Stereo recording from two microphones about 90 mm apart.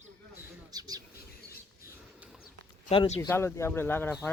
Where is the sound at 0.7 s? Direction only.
45° right (ahead or behind).